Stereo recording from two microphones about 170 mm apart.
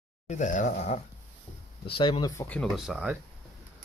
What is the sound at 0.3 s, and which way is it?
Speech, 45° left (ahead or behind).